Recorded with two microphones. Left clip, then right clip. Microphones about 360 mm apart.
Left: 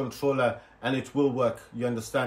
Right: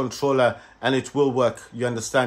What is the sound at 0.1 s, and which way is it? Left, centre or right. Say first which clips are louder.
Speech: right 6 dB; centre.